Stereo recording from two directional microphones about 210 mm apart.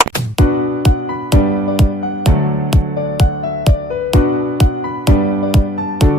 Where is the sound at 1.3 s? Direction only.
Centre (ahead or behind).